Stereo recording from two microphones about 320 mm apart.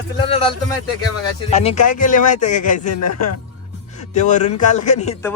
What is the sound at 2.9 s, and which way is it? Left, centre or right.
Speech, left.